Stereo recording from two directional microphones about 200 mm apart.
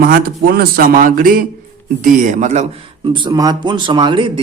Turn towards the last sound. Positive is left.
turn(degrees=-25)  # may be behind; listen again after turning